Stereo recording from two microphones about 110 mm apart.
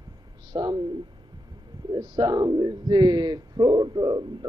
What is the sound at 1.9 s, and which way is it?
Speech, 40° right (ahead or behind).